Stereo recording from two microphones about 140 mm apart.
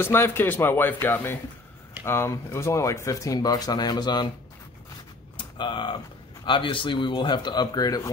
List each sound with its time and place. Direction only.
0.0 s a man's voice: 15° left (ahead or behind)
5.4 s speech: 35° left (ahead or behind)